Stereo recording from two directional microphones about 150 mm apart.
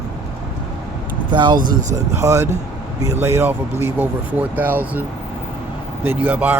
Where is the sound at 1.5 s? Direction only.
65° right (ahead or behind).